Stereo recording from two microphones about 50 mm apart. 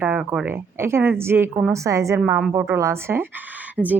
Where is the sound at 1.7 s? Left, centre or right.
Right.